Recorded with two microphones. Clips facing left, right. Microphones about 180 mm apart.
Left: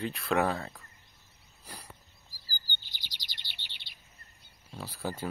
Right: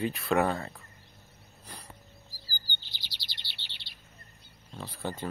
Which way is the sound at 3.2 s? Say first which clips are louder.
Right 1 dB; 15° left (ahead or behind).